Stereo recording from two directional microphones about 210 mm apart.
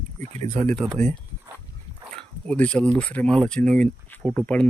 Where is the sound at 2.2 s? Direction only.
5° left (ahead or behind).